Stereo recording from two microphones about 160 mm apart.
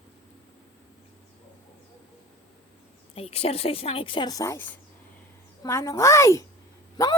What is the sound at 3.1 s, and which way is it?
Speech, 40° left (ahead or behind).